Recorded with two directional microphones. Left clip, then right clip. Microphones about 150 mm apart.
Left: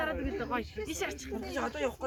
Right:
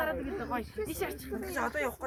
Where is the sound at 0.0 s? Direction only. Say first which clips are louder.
Right 1 dB; 90° right.